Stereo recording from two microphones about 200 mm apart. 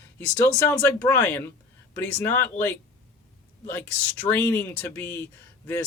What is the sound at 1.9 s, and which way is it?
Speech, 10° left (ahead or behind).